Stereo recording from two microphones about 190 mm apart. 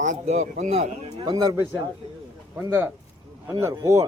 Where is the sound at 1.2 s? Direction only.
20° right (ahead or behind).